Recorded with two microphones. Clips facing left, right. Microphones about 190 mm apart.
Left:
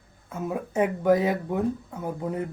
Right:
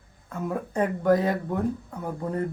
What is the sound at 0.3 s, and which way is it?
Speech, 10° left (ahead or behind).